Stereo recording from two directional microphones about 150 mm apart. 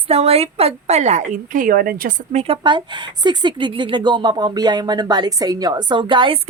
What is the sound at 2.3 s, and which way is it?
A woman's voice, 40° right (ahead or behind).